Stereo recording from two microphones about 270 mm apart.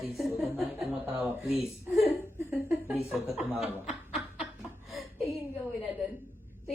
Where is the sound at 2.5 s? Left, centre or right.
Centre.